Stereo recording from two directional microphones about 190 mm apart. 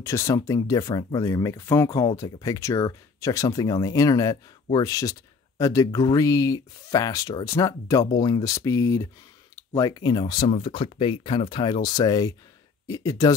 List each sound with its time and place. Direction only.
0.0 s speech: 15° left (ahead or behind)